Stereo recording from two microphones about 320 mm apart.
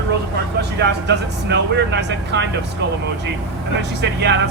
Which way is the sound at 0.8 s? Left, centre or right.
Right.